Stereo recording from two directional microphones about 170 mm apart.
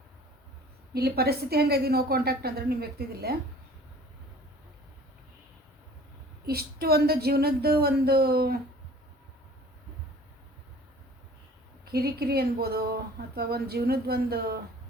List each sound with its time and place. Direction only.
0.9 s a woman's voice: 65° right (ahead or behind)
6.4 s a woman's voice: 65° right (ahead or behind)
11.9 s speech: 65° right (ahead or behind)